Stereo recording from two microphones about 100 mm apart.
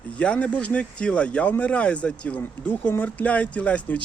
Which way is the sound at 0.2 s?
10° left (ahead or behind).